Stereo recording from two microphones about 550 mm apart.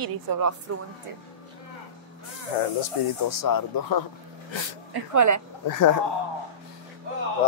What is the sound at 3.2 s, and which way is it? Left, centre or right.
Speech, left.